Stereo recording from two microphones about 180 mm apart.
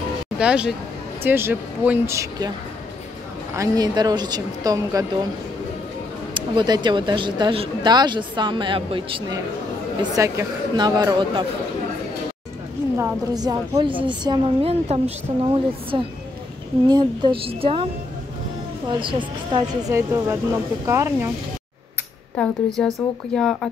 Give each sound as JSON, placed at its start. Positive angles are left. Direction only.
{"t": 0.4, "sound": "speech", "side_deg": -5}
{"t": 3.5, "sound": "speech", "side_deg": -20}
{"t": 6.3, "sound": "speech", "side_deg": -25}
{"t": 10.1, "sound": "speech", "side_deg": -20}
{"t": 12.9, "sound": "speech", "side_deg": -20}
{"t": 18.9, "sound": "speech", "side_deg": -25}
{"t": 19.9, "sound": "speech", "side_deg": -15}
{"t": 22.4, "sound": "speech", "side_deg": 5}